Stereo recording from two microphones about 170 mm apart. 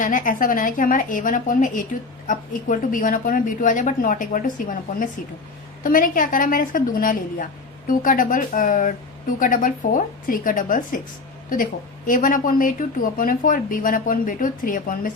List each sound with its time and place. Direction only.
0.0 s a woman's voice: 50° left (ahead or behind)